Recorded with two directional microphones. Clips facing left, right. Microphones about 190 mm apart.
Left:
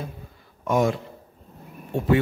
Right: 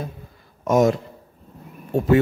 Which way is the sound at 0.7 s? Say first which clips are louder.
Right 5 dB; 40° right (ahead or behind).